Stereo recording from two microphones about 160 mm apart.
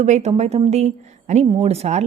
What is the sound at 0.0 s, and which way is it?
Speech, 45° right (ahead or behind).